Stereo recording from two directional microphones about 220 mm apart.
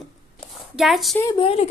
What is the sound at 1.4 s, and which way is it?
Speech, 25° left (ahead or behind).